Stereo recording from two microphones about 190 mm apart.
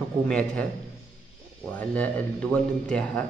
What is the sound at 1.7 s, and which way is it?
Speech, 10° left (ahead or behind).